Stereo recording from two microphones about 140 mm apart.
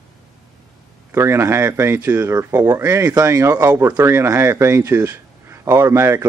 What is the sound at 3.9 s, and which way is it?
Speech, 15° right (ahead or behind).